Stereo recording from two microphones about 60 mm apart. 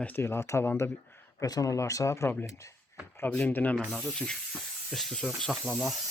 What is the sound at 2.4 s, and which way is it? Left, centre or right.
Speech, left.